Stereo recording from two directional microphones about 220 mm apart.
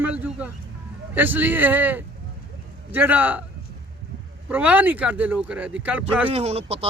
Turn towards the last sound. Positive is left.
turn(degrees=-25)  # may be behind; listen again after turning